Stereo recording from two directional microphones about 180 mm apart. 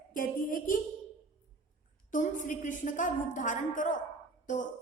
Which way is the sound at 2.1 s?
45° left (ahead or behind).